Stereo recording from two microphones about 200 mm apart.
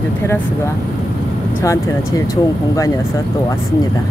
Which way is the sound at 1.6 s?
15° left (ahead or behind).